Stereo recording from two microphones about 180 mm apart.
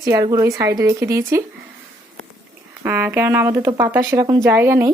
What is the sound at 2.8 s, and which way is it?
Speech, 10° right (ahead or behind).